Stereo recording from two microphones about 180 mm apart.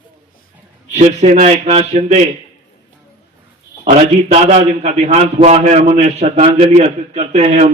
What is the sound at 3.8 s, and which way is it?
A man's voice, 40° right (ahead or behind).